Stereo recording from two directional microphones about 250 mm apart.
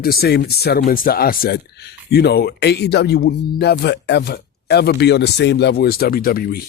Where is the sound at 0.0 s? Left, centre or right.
Left.